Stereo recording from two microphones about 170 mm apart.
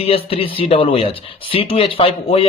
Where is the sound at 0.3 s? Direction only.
30° left (ahead or behind).